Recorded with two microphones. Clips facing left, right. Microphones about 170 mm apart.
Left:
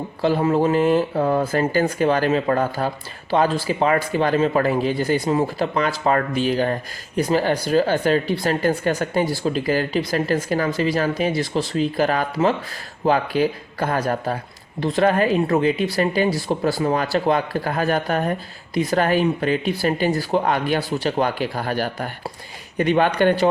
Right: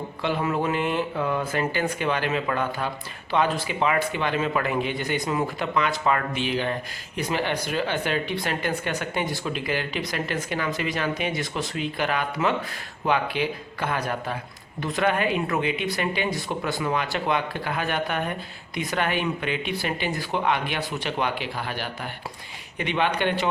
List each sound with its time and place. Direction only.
0.2 s speech: 35° left (ahead or behind)